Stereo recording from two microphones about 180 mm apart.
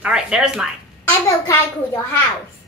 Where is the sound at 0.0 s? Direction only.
5° right (ahead or behind).